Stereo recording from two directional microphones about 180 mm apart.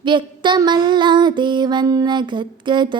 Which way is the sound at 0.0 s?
25° right (ahead or behind).